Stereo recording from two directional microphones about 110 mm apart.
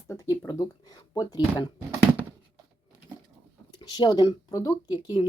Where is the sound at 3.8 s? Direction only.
40° left (ahead or behind).